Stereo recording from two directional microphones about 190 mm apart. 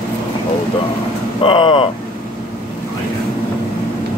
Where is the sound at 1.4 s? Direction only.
25° left (ahead or behind).